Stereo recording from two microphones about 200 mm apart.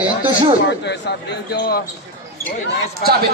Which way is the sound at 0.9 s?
55° left (ahead or behind).